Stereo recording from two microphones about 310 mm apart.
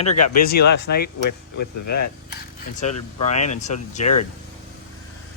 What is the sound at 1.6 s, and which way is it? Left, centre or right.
Speech, left.